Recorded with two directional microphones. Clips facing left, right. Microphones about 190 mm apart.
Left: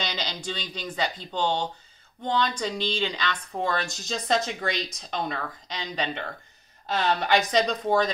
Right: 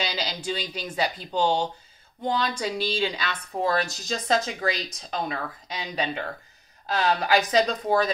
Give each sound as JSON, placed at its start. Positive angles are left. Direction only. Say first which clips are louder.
{"t": 0.0, "sound": "speech", "louder": "right 2 dB", "side_deg": -10}